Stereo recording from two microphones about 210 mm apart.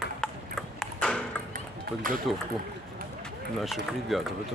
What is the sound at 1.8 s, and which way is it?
Speech, 40° right (ahead or behind).